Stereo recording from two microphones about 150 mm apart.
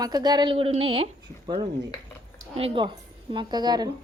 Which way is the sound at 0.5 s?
40° right (ahead or behind).